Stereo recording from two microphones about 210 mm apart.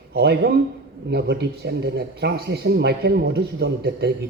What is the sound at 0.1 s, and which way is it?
A man's voice, 50° right (ahead or behind).